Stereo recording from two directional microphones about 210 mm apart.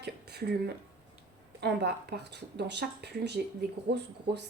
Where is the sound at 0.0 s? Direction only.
50° right (ahead or behind).